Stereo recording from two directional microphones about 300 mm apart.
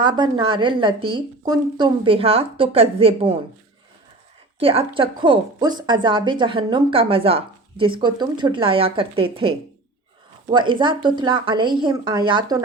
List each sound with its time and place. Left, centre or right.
0.0 s a woman's voice: centre
4.6 s a woman's voice: centre